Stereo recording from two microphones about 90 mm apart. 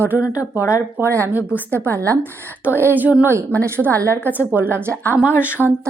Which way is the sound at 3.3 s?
35° right (ahead or behind).